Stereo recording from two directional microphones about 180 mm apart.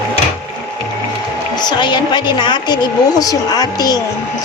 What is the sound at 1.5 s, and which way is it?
A woman's voice, 25° left (ahead or behind).